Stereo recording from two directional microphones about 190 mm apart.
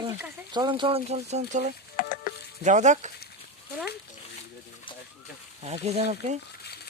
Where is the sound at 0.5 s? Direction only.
25° right (ahead or behind); by 1.7 s 40° right (ahead or behind).